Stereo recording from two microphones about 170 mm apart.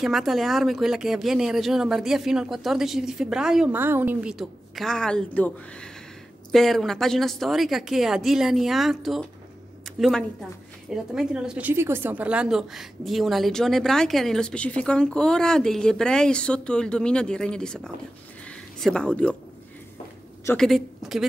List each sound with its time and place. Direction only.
0.0 s a woman's voice: centre (ahead or behind)
18.5 s a sound: 5° left (ahead or behind)
20.5 s a woman's voice: centre (ahead or behind)